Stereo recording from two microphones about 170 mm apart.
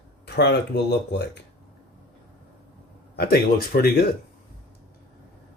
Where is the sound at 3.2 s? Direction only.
65° left (ahead or behind).